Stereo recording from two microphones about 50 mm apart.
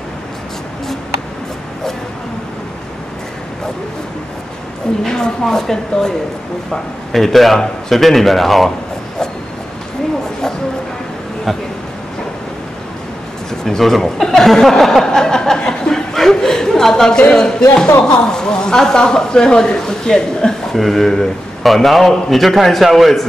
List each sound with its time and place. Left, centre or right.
5.0 s a woman's voice: centre
13.5 s a woman's voice: centre